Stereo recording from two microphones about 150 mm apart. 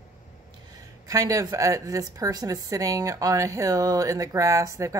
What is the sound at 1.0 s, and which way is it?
Speech, 25° right (ahead or behind).